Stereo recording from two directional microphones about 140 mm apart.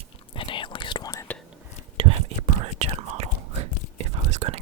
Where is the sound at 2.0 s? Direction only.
40° right (ahead or behind).